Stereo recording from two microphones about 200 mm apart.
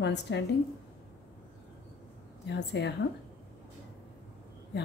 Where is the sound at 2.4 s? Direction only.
60° left (ahead or behind).